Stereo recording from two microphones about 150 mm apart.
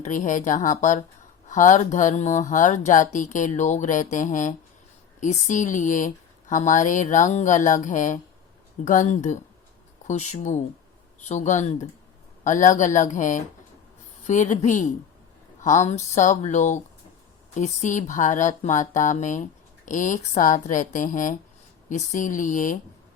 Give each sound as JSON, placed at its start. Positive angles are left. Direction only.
{"t": 0.0, "sound": "speech", "side_deg": 55}